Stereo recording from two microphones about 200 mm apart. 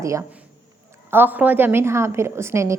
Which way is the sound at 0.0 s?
15° right (ahead or behind).